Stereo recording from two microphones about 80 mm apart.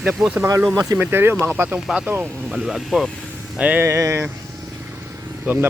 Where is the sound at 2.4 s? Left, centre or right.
Centre.